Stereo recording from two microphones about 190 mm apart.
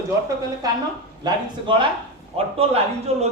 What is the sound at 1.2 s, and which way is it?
A man's voice, 25° right (ahead or behind).